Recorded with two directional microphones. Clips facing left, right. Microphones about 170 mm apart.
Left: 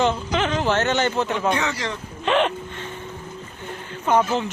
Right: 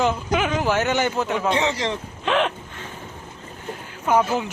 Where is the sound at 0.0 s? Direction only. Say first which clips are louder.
Even; 5° right (ahead or behind).